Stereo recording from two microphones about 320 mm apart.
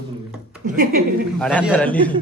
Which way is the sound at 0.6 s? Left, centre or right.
Right.